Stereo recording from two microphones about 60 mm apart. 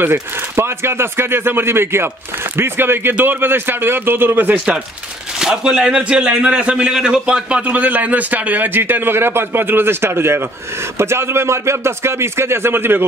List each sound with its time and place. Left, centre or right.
0.0 s speech: right
5.4 s a man's voice: centre; by 13.0 s right